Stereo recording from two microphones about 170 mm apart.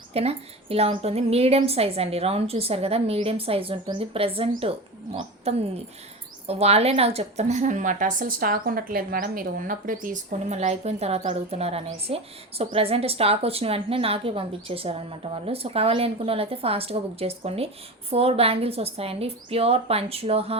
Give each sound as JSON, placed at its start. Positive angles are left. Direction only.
{"t": 0.1, "sound": "a woman's voice", "side_deg": -35}